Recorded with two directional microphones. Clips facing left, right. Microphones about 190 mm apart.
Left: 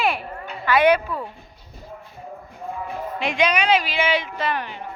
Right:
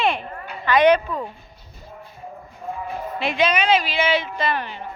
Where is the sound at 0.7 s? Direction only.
10° left (ahead or behind).